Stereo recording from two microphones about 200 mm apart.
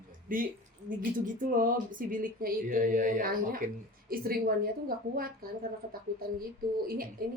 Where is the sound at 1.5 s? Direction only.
45° right (ahead or behind).